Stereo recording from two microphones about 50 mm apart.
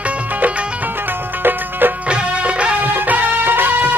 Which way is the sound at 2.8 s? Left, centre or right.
Right.